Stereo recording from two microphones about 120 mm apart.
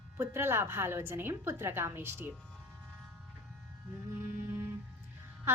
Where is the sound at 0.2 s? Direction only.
20° right (ahead or behind).